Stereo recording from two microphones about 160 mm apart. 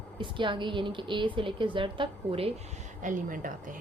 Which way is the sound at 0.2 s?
30° right (ahead or behind).